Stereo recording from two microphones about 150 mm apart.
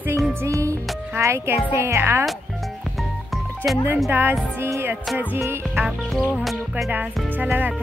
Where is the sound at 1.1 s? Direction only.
15° right (ahead or behind).